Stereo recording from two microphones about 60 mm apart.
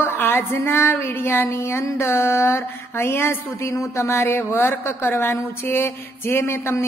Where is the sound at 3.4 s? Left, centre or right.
Left.